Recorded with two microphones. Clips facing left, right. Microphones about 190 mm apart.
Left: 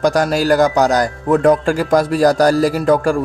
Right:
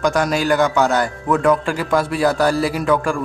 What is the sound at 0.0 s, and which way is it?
Speech, 40° left (ahead or behind).